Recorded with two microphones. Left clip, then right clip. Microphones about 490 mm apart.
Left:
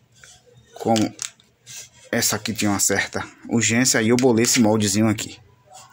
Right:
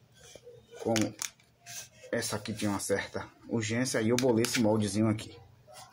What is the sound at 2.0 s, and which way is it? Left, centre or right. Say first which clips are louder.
Speech: left 11 dB; centre.